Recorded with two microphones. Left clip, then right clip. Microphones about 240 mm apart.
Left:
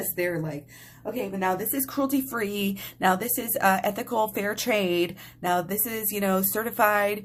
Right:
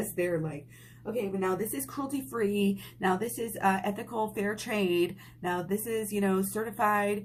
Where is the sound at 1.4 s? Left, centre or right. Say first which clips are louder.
Left 4 dB; left.